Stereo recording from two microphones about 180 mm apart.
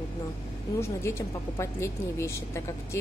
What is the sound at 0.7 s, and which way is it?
Speech, 15° left (ahead or behind).